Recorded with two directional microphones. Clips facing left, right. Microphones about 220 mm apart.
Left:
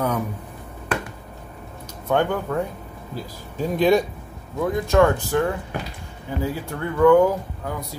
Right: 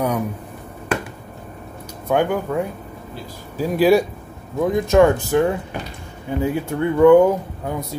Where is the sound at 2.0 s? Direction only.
10° right (ahead or behind).